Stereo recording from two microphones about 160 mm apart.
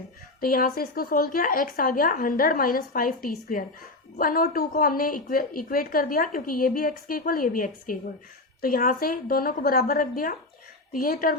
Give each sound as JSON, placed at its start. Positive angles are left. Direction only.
{"t": 0.3, "sound": "a woman's voice", "side_deg": 60}